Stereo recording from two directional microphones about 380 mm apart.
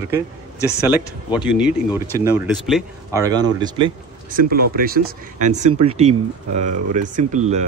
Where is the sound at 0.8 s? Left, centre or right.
Centre.